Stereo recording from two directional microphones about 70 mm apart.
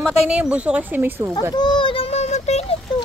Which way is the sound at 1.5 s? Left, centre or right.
Left.